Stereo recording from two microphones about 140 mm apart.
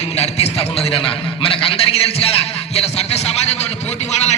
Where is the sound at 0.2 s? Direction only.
45° left (ahead or behind).